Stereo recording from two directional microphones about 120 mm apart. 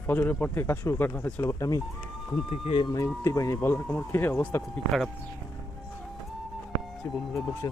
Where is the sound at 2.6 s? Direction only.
50° left (ahead or behind).